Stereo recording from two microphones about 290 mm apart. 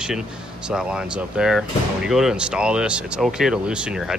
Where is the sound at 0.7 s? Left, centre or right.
Centre.